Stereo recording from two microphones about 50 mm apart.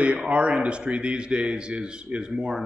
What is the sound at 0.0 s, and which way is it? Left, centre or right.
A man's voice, right.